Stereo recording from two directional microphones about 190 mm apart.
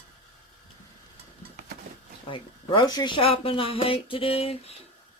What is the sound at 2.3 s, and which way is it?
Speech, 20° left (ahead or behind).